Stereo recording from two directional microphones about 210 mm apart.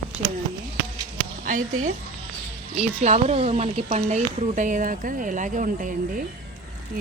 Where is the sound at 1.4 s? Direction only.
40° right (ahead or behind).